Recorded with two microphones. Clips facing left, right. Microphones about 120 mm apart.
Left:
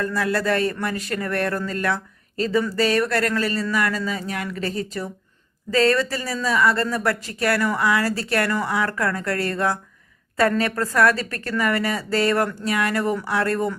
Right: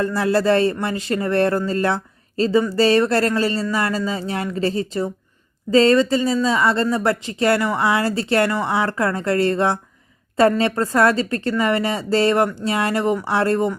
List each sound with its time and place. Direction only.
0.0 s a woman's voice: 30° right (ahead or behind)